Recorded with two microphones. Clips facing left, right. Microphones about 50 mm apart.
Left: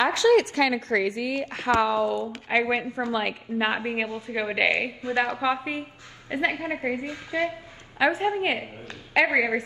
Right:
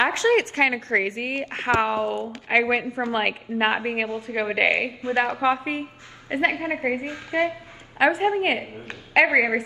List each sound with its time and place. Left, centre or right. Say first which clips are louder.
0.0 s a woman's voice: even; right
3.1 s a woman's voice: right 3 dB; right
3.5 s a woman's voice: right 2 dB; right